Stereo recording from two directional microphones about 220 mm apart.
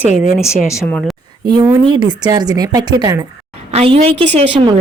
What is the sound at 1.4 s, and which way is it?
Speech, 20° right (ahead or behind).